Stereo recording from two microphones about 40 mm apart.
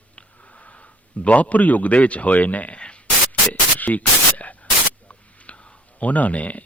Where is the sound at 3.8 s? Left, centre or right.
Left.